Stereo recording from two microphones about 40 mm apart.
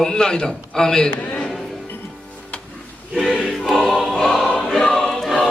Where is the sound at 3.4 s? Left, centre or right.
Centre.